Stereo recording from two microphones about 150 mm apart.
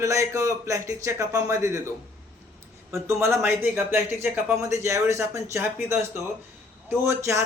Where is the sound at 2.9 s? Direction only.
20° right (ahead or behind).